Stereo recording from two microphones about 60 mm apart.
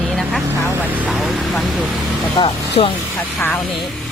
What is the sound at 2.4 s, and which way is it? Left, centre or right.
Speech, left.